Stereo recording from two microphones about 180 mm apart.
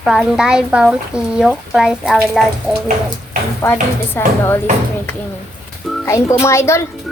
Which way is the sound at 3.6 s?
10° left (ahead or behind).